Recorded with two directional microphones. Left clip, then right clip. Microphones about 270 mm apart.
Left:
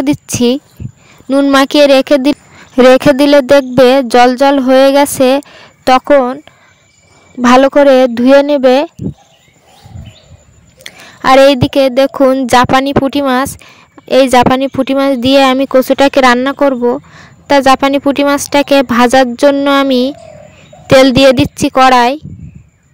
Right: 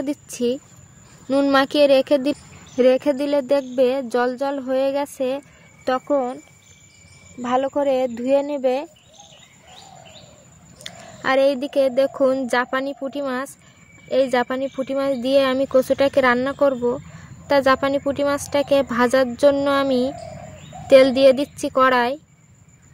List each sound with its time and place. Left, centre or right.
0.0 s speech: left
7.4 s speech: left
10.8 s speech: left